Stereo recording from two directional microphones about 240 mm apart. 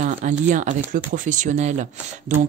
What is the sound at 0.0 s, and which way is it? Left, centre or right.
Speech, right.